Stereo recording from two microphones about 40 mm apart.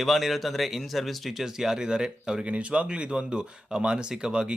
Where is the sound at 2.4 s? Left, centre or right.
Right.